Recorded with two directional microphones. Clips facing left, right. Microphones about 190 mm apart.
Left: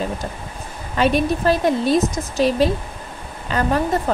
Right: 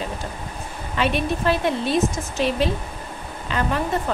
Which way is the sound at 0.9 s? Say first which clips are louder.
Left 5 dB; 40° left (ahead or behind).